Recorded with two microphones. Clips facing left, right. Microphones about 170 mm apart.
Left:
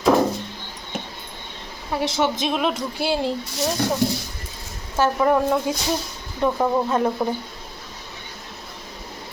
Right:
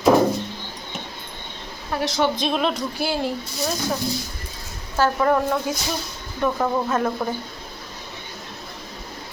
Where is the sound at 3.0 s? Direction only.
25° left (ahead or behind).